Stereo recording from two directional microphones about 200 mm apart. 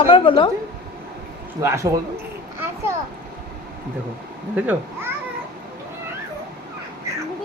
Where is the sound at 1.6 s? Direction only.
15° right (ahead or behind).